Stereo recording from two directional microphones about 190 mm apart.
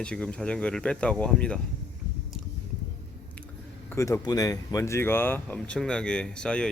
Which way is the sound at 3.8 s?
15° left (ahead or behind).